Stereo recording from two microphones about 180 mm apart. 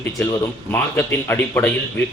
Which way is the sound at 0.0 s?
10° left (ahead or behind).